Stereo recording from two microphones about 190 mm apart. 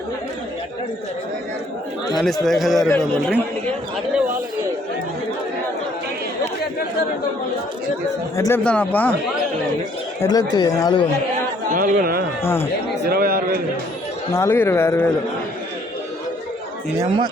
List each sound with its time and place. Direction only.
2.1 s speech: centre (ahead or behind)
8.4 s speech: 15° left (ahead or behind)
10.2 s speech: 20° left (ahead or behind)
11.7 s speech: 45° right (ahead or behind)
12.4 s speech: 10° left (ahead or behind)
13.1 s a sound: 50° right (ahead or behind)
14.3 s speech: 10° left (ahead or behind)